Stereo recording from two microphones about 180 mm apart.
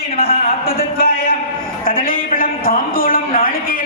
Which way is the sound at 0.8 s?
55° left (ahead or behind).